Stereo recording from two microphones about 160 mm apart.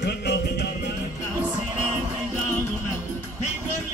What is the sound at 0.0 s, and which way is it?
Music, 90° left.